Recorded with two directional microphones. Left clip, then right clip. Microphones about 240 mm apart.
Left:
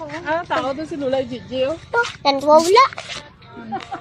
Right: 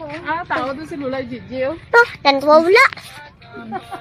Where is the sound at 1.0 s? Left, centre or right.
Centre.